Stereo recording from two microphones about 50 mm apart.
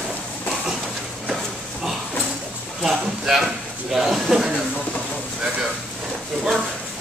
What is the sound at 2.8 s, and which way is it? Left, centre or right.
Speech, centre.